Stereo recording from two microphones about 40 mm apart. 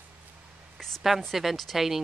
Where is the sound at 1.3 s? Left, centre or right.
Centre.